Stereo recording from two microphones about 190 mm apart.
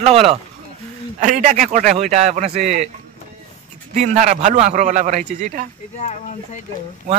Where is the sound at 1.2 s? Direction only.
40° right (ahead or behind).